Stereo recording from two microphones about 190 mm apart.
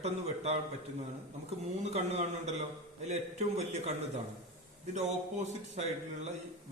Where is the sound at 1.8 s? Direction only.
35° right (ahead or behind).